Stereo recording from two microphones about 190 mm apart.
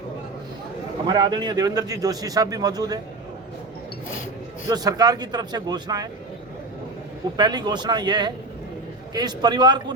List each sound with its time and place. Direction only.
1.0 s a man's voice: 25° right (ahead or behind)
4.7 s a man's voice: 20° right (ahead or behind)
7.3 s a man's voice: 20° right (ahead or behind)